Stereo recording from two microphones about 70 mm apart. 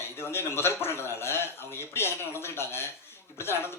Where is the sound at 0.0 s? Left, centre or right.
Left.